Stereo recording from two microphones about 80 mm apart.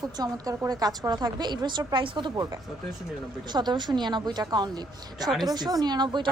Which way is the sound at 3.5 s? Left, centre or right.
Right.